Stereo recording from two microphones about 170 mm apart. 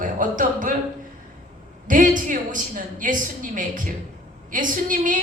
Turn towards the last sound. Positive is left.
turn(degrees=-50)  # may be behind; listen again after turning